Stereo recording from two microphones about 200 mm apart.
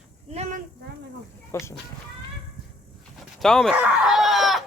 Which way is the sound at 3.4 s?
Centre (ahead or behind).